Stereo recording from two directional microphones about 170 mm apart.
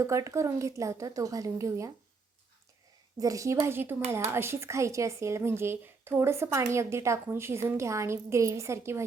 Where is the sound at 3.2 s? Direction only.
20° right (ahead or behind).